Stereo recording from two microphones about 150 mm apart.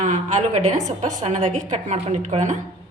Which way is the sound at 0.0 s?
55° right (ahead or behind).